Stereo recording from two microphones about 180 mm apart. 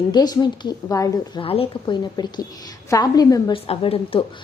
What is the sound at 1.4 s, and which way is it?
A woman's voice, 30° left (ahead or behind).